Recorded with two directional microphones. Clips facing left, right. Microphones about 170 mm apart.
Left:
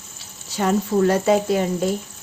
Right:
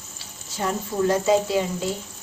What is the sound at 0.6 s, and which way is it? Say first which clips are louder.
A woman's voice: left 6 dB; 70° left (ahead or behind).